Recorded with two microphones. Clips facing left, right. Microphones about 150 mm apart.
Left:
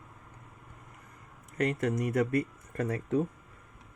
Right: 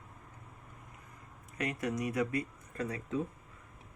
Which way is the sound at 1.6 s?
55° left (ahead or behind).